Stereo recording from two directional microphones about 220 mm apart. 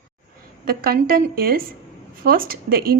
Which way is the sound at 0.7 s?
40° right (ahead or behind).